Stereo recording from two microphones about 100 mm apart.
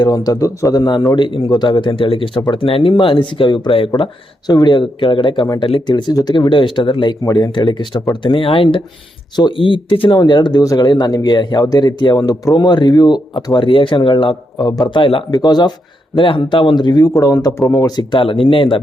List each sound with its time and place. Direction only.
0.0 s speech: 40° left (ahead or behind); by 2.8 s 65° left (ahead or behind)
2.9 s speech: 55° left (ahead or behind)
3.8 s speech: 60° left (ahead or behind)
4.4 s speech: 45° left (ahead or behind)
6.5 s speech: 55° left (ahead or behind)
10.2 s speech: 45° left (ahead or behind)
15.3 s speech: 45° left (ahead or behind)
16.1 s speech: 55° left (ahead or behind); by 18.0 s 40° left (ahead or behind)
18.1 s speech: 55° left (ahead or behind)